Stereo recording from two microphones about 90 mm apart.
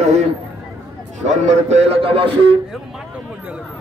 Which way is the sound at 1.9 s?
90° right.